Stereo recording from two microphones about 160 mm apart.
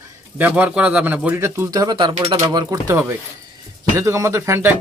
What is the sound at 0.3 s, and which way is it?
A man's voice, 10° right (ahead or behind).